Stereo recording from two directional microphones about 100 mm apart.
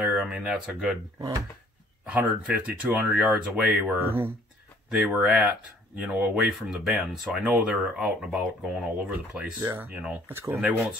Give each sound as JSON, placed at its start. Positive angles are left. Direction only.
{"t": 0.0, "sound": "speech", "side_deg": -15}
{"t": 2.0, "sound": "speech", "side_deg": -15}
{"t": 4.0, "sound": "speech", "side_deg": -20}
{"t": 4.9, "sound": "speech", "side_deg": -10}